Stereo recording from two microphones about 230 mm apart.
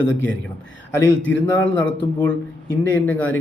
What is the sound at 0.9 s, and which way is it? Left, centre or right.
Speech, centre.